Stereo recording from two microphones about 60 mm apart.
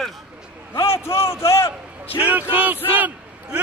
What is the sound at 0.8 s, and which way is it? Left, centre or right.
Speech, left.